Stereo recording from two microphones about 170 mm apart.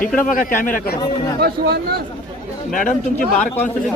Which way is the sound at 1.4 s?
65° right (ahead or behind).